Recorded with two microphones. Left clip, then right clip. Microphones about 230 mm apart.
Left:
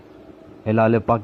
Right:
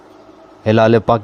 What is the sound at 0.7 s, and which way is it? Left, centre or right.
Speech, right.